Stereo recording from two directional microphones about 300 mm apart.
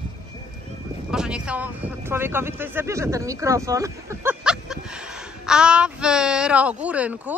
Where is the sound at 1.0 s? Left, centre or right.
Centre.